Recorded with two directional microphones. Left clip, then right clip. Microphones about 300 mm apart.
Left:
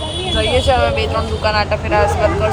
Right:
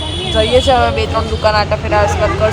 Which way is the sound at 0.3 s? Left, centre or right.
Centre.